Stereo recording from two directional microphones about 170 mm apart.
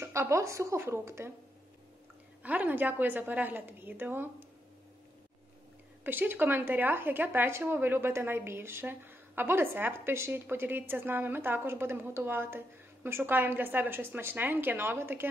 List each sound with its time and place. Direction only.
0.0 s speech: 15° right (ahead or behind)
2.4 s speech: 10° right (ahead or behind)
6.0 s speech: 10° right (ahead or behind)